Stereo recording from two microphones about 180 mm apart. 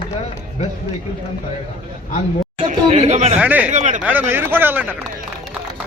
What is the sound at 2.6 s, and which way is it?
Chatter, 30° right (ahead or behind).